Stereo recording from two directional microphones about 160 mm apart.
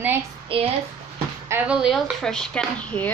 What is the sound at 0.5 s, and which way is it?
Speech, 35° right (ahead or behind).